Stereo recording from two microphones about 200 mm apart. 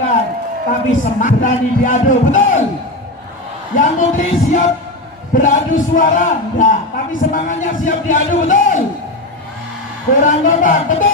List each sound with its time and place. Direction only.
0.9 s speech: 40° left (ahead or behind)
3.8 s a man's voice: 40° left (ahead or behind)
10.2 s speech: 40° left (ahead or behind)